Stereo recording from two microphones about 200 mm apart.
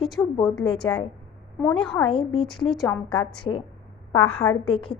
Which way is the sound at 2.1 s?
25° left (ahead or behind).